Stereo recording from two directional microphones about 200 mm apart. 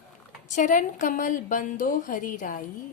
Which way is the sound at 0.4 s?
40° left (ahead or behind).